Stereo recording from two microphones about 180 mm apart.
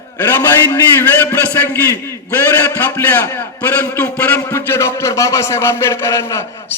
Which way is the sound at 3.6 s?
10° left (ahead or behind).